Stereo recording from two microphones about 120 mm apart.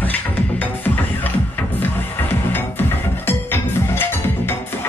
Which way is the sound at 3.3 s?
20° left (ahead or behind).